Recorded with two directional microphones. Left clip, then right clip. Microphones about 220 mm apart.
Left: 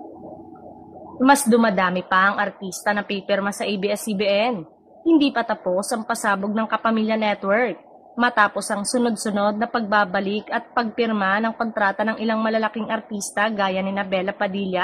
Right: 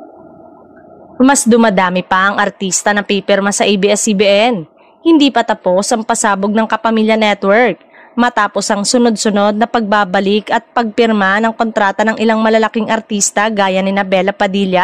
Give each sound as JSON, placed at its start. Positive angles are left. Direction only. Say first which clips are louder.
{"t": 1.2, "sound": "speech", "louder": "right 7 dB", "side_deg": -45}